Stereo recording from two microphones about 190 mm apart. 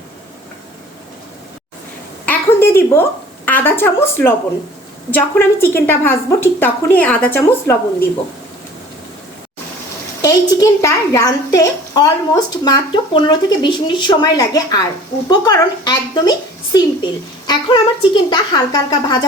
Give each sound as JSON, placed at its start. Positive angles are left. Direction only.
{"t": 2.2, "sound": "a woman's voice", "side_deg": 10}
{"t": 10.2, "sound": "a woman's voice", "side_deg": 20}